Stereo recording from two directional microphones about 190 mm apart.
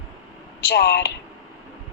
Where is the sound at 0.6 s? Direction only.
60° left (ahead or behind).